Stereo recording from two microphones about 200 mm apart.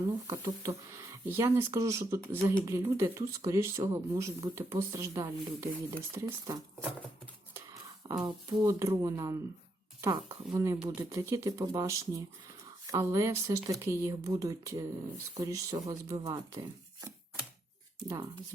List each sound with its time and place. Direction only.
0.3 s speech: 15° right (ahead or behind)